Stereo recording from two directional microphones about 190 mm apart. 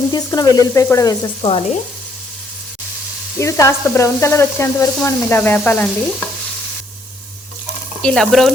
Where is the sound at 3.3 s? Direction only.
15° left (ahead or behind).